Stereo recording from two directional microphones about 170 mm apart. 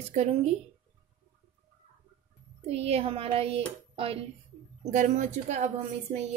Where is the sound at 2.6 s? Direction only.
35° right (ahead or behind).